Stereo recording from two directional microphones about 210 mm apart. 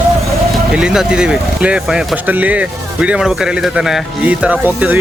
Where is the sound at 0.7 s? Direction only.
5° right (ahead or behind).